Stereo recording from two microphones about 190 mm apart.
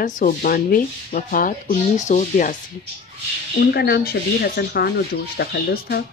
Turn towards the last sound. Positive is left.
turn(degrees=55)  # may be behind; listen again after turning